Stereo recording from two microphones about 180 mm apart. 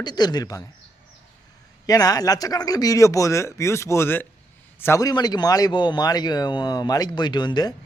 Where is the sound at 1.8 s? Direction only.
20° left (ahead or behind).